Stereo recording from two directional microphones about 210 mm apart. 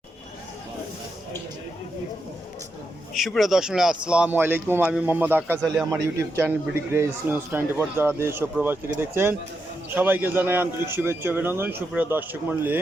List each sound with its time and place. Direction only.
3.2 s a man's voice: centre (ahead or behind)